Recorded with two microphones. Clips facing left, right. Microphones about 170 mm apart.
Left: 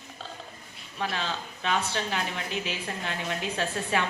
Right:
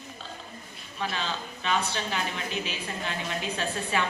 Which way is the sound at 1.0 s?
55° left (ahead or behind).